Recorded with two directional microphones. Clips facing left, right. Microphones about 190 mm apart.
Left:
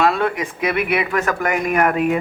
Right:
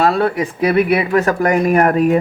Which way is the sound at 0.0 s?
35° right (ahead or behind).